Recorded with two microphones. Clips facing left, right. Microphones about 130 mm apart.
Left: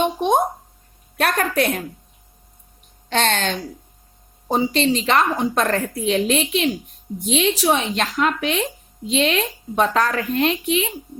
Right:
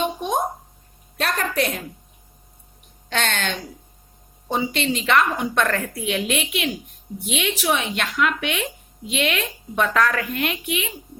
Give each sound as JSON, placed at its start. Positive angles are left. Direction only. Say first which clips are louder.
{"t": 0.0, "sound": "a sound", "louder": "left 5 dB", "side_deg": 65}
{"t": 1.2, "sound": "a woman's voice", "louder": "left 4 dB", "side_deg": 50}
{"t": 3.1, "sound": "a woman's voice", "louder": "left 4 dB", "side_deg": 40}